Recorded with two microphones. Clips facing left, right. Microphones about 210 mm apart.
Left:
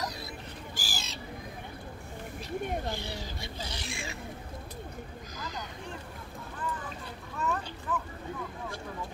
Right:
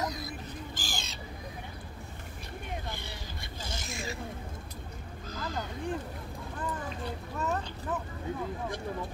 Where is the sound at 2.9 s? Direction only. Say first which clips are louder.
Left 5 dB; 50° right (ahead or behind).